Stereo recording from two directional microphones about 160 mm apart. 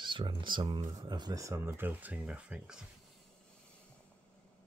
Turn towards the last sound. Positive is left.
turn(degrees=-5)  # may be behind; listen again after turning